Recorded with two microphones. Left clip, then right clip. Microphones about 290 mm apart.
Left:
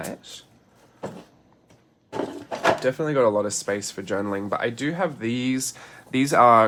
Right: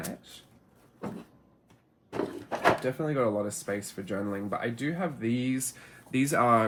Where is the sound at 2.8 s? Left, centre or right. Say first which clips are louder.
Left 8 dB; left.